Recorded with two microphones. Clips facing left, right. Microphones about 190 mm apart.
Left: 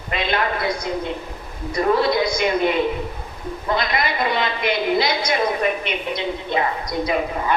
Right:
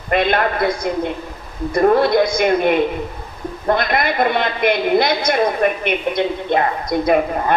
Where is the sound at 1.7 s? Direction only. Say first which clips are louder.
Right 5 dB; 55° right (ahead or behind).